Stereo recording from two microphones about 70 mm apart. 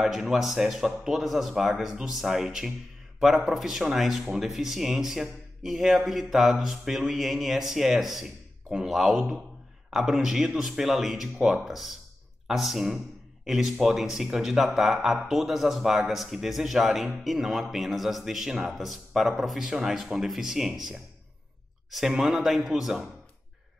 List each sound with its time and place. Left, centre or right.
0.0 s speech: centre
11.3 s speech: centre
11.6 s speech: centre